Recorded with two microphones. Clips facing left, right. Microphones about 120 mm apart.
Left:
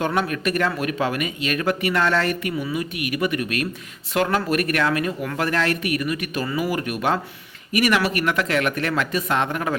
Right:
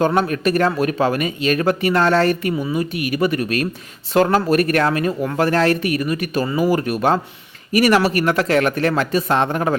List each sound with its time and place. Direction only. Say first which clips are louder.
0.0 s speech: right 5 dB; 35° right (ahead or behind)